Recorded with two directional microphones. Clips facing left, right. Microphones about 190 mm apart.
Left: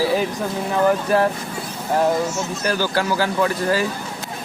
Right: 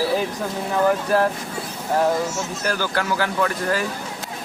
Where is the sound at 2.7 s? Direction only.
30° left (ahead or behind).